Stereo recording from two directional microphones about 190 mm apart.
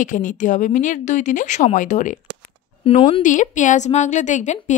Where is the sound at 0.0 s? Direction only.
45° left (ahead or behind).